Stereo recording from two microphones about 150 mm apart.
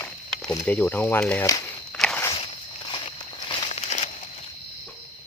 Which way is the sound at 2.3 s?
35° left (ahead or behind).